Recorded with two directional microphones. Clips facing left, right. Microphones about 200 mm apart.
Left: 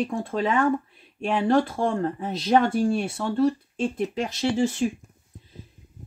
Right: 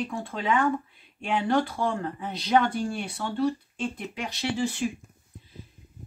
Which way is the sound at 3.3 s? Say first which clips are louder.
Left 4 dB; 45° left (ahead or behind).